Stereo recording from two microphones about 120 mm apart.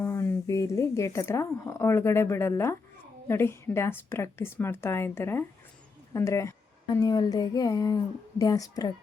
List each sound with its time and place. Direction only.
0.0 s a woman's voice: 20° left (ahead or behind)